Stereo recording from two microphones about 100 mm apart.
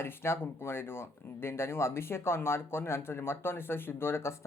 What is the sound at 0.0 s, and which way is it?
Speech, 25° left (ahead or behind).